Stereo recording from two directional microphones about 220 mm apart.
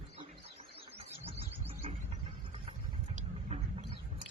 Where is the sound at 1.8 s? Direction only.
25° right (ahead or behind).